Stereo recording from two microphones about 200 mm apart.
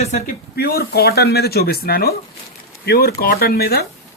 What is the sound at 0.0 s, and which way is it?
Speech, 35° left (ahead or behind).